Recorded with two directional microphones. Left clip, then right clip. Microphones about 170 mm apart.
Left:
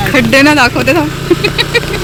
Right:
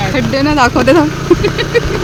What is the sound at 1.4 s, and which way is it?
Vehicle, 15° right (ahead or behind).